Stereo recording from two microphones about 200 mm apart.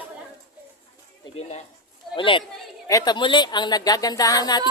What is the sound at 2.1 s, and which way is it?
Speech, 25° left (ahead or behind).